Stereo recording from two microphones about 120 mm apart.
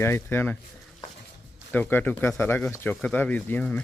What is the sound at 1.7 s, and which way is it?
Speech, 15° left (ahead or behind).